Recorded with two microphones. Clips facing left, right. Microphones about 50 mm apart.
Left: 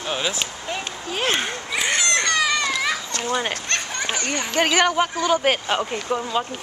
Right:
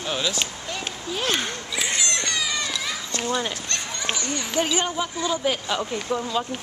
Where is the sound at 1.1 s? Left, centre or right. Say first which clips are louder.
Left 3 dB; left.